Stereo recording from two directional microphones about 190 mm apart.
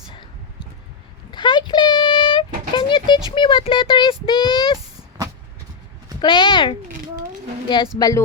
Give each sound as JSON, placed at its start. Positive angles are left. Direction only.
{"t": 1.3, "sound": "a sound", "side_deg": 25}
{"t": 3.3, "sound": "speech", "side_deg": 25}
{"t": 6.1, "sound": "speech", "side_deg": 25}
{"t": 7.9, "sound": "speech", "side_deg": 20}